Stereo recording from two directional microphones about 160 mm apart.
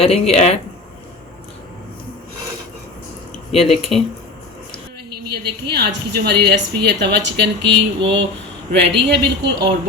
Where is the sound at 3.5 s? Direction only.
40° left (ahead or behind).